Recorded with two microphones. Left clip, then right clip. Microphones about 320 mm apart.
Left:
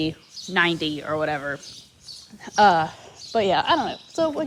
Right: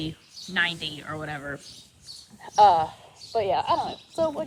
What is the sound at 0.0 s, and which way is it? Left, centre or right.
Speech, centre.